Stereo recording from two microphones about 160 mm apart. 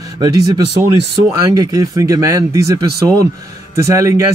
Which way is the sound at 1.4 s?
25° right (ahead or behind).